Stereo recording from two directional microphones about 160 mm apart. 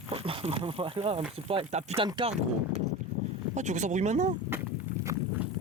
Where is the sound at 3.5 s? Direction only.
50° right (ahead or behind).